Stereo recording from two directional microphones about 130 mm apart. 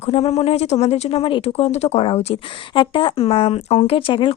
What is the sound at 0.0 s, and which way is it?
A woman's voice, 50° left (ahead or behind).